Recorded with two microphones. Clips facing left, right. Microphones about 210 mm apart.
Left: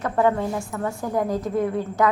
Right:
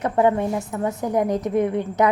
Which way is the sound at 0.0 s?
20° right (ahead or behind).